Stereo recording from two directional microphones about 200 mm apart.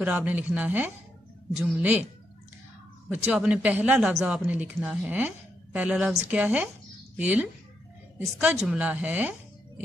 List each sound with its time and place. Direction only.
0.0 s a woman's voice: 5° right (ahead or behind)
3.1 s a woman's voice: 5° right (ahead or behind)